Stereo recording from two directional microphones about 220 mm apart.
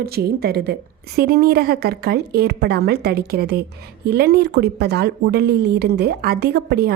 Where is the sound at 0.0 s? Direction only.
45° right (ahead or behind).